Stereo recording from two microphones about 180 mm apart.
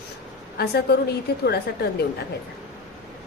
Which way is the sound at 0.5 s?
65° left (ahead or behind).